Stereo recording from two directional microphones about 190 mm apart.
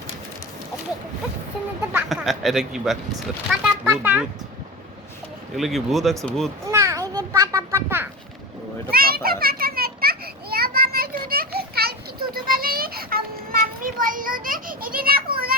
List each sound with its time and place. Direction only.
1.9 s speech: 5° right (ahead or behind)
5.5 s speech: centre (ahead or behind)
6.7 s children playing: 15° right (ahead or behind)
8.9 s children playing: 50° right (ahead or behind)